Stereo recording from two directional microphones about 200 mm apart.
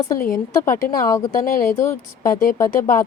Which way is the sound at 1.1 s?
15° left (ahead or behind).